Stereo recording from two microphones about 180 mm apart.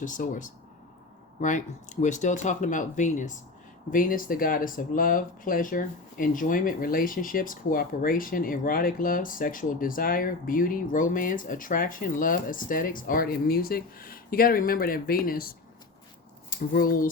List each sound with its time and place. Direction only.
0.0 s speech: 45° left (ahead or behind)